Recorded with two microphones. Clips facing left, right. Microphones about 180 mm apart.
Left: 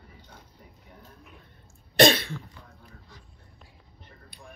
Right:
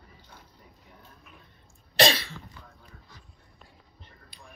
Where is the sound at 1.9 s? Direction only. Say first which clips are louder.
Left 5 dB; 50° left (ahead or behind).